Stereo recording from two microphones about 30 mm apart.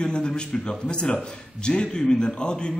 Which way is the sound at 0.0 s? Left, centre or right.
Left.